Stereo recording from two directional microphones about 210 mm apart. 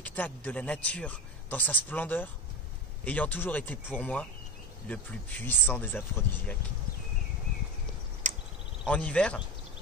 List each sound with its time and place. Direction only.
0.0 s speech: 10° left (ahead or behind)
8.2 s a sound: 35° right (ahead or behind)
8.8 s speech: 5° left (ahead or behind)